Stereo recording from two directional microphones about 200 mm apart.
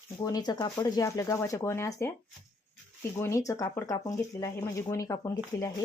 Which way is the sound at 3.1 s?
15° left (ahead or behind).